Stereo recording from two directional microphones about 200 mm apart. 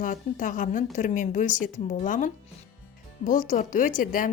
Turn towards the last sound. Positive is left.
turn(degrees=45)  # may be behind; listen again after turning